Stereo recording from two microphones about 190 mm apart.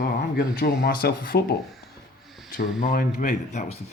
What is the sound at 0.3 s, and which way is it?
Speech, 55° left (ahead or behind).